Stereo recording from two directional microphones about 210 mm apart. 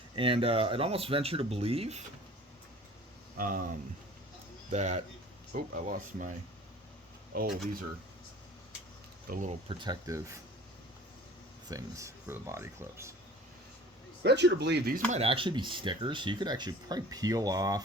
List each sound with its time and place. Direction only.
0.2 s speech: 25° right (ahead or behind)
3.3 s speech: 40° right (ahead or behind)
9.3 s speech: 35° right (ahead or behind)
9.6 s speech: 20° right (ahead or behind)
11.7 s speech: 15° right (ahead or behind)
14.3 s speech: 55° right (ahead or behind)
15.1 s speech: 25° right (ahead or behind)